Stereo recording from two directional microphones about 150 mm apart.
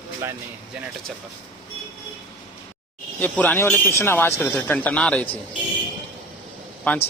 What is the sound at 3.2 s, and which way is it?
A man's voice, 10° left (ahead or behind).